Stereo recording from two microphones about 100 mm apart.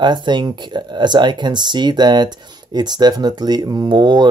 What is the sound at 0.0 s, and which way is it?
Speech, 50° right (ahead or behind).